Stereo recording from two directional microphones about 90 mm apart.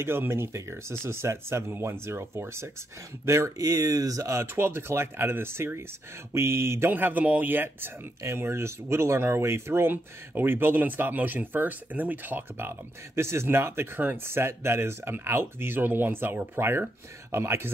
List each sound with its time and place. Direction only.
0.0 s speech: 25° right (ahead or behind)